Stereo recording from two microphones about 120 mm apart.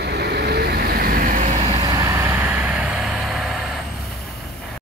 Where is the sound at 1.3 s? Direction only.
80° right.